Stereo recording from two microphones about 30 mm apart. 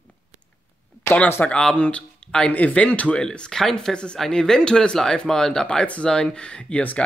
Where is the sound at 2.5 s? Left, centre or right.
Left.